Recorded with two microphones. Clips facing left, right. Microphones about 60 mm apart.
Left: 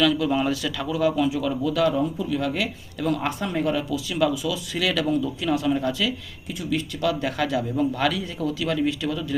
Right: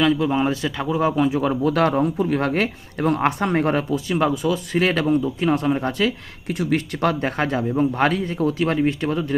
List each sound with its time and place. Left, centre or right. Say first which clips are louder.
0.0 s speech: right 2 dB; right
3.8 s speech: right 3 dB; right
6.5 s speech: right 5 dB; right